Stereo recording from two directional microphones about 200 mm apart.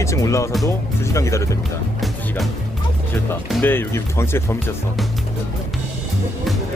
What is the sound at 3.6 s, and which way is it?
Speech, 10° left (ahead or behind).